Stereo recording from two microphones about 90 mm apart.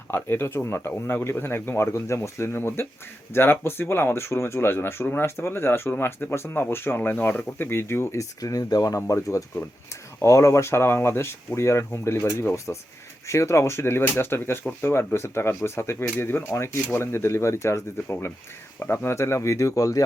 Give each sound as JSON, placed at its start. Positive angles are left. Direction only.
{"t": 0.1, "sound": "speech", "side_deg": 25}